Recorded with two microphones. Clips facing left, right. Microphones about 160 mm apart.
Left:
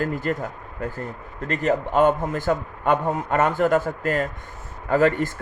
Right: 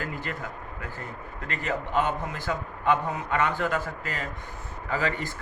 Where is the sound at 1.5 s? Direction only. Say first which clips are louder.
Left 9 dB; 45° left (ahead or behind).